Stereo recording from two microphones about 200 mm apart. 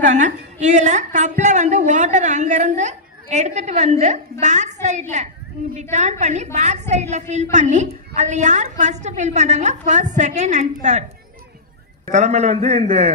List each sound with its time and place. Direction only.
0.0 s a woman's voice: 35° right (ahead or behind)
12.1 s a woman's voice: 35° right (ahead or behind)